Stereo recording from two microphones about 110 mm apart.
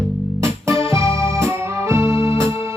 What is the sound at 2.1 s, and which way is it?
Music, 50° left (ahead or behind).